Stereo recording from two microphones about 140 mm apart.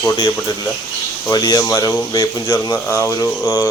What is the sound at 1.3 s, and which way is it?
Speech, 25° left (ahead or behind).